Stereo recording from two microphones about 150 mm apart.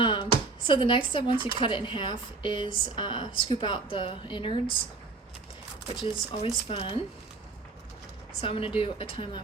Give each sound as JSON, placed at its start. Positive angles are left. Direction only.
{"t": 0.0, "sound": "a sound", "side_deg": 35}
{"t": 0.7, "sound": "a woman's voice", "side_deg": 35}
{"t": 5.9, "sound": "a woman's voice", "side_deg": 35}
{"t": 8.4, "sound": "a woman's voice", "side_deg": 35}